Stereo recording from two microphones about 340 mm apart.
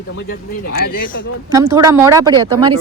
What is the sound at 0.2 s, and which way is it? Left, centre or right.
Speech, left.